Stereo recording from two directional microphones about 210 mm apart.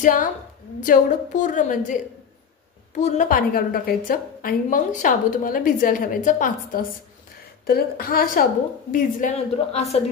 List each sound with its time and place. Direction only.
0.0 s a woman's voice: 40° left (ahead or behind)
3.0 s a woman's voice: 35° left (ahead or behind)
8.9 s a woman's voice: 35° left (ahead or behind)